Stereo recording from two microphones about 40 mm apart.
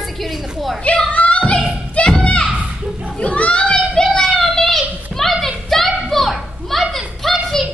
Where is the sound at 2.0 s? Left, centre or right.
Left.